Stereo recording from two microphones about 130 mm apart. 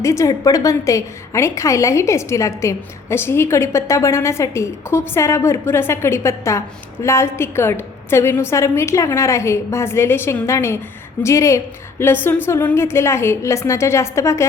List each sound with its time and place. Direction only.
0.0 s a woman's voice: 25° left (ahead or behind)